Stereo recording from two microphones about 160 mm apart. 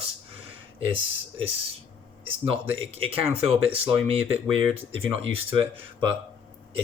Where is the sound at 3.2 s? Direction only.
35° right (ahead or behind).